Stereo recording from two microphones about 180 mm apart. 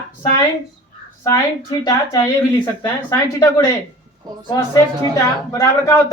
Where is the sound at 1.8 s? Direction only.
20° left (ahead or behind).